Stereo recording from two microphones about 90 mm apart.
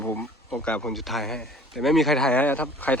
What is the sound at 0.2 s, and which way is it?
Speech, 5° left (ahead or behind).